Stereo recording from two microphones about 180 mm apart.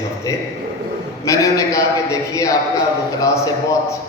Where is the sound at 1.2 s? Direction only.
20° left (ahead or behind).